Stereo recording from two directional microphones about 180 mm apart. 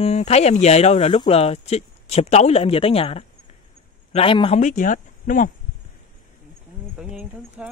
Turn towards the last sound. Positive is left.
turn(degrees=-5)  # may be behind; listen again after turning